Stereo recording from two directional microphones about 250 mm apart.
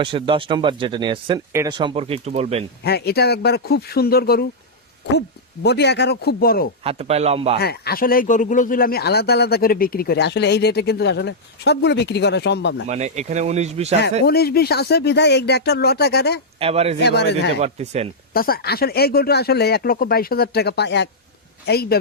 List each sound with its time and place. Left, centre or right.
0.0 s speech: right
2.8 s speech: left
5.6 s speech: left
6.8 s speech: right
7.6 s speech: left
12.9 s speech: right
14.3 s speech: left
16.6 s speech: right
17.0 s speech: left
17.6 s speech: right
18.3 s speech: left